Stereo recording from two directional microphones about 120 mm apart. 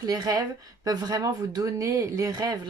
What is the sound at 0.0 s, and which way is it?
A woman's voice, 30° right (ahead or behind).